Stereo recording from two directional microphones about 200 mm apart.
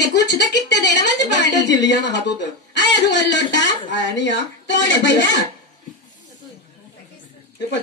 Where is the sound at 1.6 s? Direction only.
60° left (ahead or behind).